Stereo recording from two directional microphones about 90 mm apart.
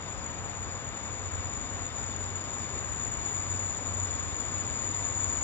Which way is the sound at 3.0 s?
20° left (ahead or behind).